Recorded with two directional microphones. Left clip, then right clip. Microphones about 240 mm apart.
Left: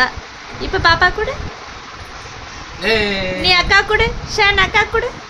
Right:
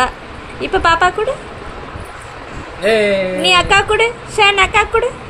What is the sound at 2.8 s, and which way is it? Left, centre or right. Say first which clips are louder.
Speech: right 4 dB; left.